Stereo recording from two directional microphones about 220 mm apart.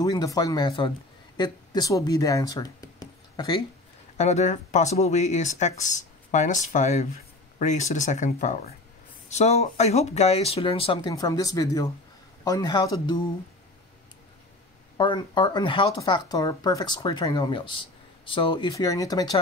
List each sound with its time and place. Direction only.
0.0 s speech: 15° left (ahead or behind)
4.2 s speech: 30° left (ahead or behind)
15.0 s speech: 20° left (ahead or behind)